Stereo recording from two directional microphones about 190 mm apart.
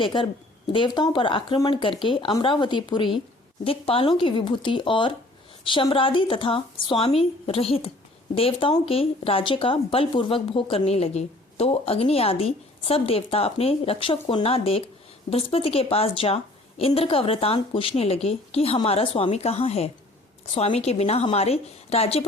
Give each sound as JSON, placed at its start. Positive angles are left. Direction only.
{"t": 0.0, "sound": "speech", "side_deg": 25}